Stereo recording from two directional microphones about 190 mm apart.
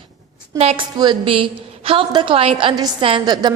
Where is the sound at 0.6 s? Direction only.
35° right (ahead or behind).